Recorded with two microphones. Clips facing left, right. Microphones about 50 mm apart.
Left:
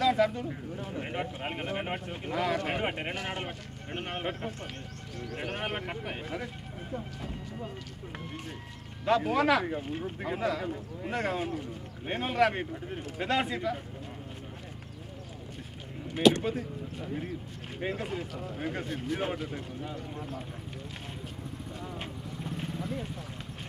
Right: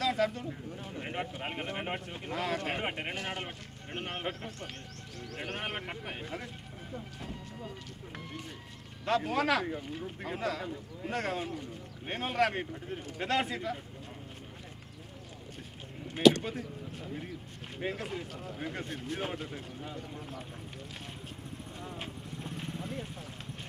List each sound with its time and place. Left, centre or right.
0.0 s speech: centre
6.3 s speech: centre
9.0 s speech: centre
9.8 s speech: left
10.0 s speech: centre
17.0 s speech: centre
18.9 s speech: left
19.1 s speech: centre
21.8 s vehicle: centre